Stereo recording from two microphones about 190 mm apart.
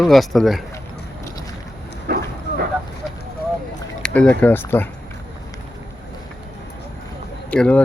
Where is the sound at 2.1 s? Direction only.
55° right (ahead or behind).